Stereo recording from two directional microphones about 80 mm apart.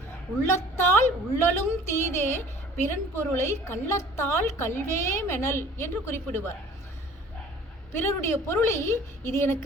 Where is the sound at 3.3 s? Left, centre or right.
Left.